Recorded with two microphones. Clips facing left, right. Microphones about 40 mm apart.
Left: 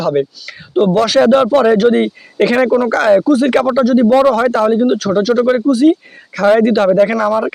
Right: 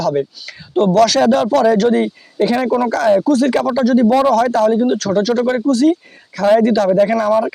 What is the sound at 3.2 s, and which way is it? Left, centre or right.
Speech, centre.